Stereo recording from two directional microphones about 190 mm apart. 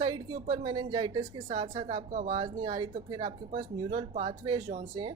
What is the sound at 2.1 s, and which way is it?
Speech, 45° right (ahead or behind).